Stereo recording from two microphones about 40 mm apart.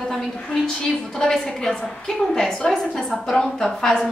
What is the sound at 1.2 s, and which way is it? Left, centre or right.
A woman's voice, centre.